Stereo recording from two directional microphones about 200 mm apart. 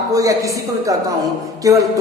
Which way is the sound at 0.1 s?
15° right (ahead or behind).